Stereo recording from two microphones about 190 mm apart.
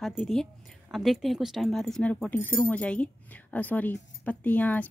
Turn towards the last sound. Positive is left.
turn(degrees=10)  # may be behind; listen again after turning